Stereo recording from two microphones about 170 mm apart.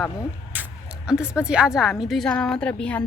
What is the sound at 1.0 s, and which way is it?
A woman's voice, 5° right (ahead or behind).